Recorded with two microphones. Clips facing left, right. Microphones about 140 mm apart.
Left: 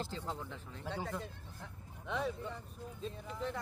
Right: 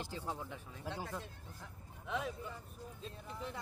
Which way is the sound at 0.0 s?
10° right (ahead or behind).